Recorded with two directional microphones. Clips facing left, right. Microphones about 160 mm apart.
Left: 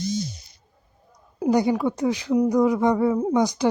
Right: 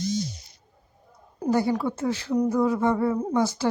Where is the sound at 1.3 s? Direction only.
10° left (ahead or behind).